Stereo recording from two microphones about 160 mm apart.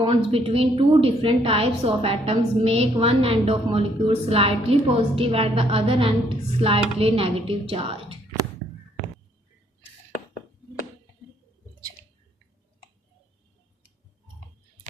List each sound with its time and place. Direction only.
0.0 s a woman's voice: 35° right (ahead or behind)